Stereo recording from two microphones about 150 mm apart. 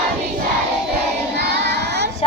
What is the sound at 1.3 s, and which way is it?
Child singing, 90° right.